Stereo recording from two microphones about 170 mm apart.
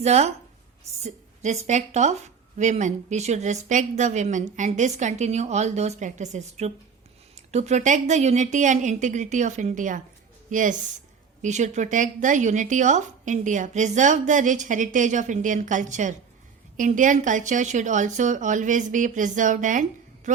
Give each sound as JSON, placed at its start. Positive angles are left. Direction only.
{"t": 0.0, "sound": "speech", "side_deg": -40}